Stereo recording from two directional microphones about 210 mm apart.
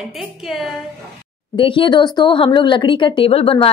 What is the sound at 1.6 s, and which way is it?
A woman's voice, 25° left (ahead or behind).